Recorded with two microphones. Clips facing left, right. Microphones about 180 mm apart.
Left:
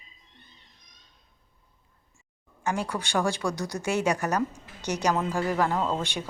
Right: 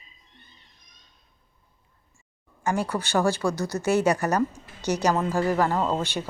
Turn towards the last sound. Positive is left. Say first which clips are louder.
# right 2 dB
turn(degrees=-5)  # may be behind; listen again after turning